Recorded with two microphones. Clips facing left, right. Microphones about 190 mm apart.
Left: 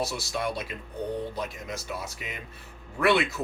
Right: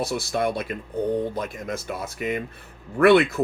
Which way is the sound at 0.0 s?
55° right (ahead or behind).